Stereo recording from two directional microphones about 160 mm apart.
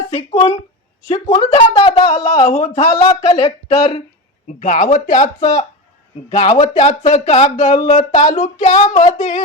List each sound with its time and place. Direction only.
0.1 s speech: 40° left (ahead or behind)
4.6 s speech: 50° left (ahead or behind)